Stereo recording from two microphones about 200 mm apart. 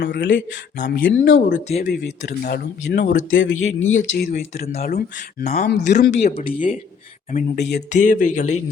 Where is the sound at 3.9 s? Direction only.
80° left.